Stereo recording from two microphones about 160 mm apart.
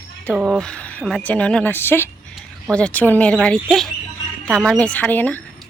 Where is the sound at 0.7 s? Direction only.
10° left (ahead or behind).